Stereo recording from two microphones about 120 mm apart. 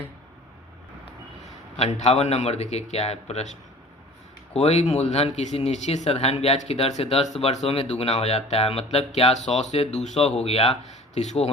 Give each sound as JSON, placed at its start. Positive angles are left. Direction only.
{"t": 1.7, "sound": "speech", "side_deg": 60}
{"t": 4.5, "sound": "speech", "side_deg": 60}